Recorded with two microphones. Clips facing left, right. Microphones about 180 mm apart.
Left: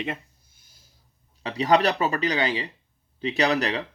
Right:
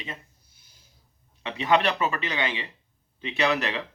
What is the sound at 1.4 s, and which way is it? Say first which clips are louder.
Speech: left 3 dB; 40° left (ahead or behind).